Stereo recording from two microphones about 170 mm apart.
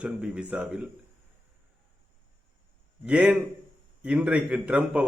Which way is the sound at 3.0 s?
5° right (ahead or behind).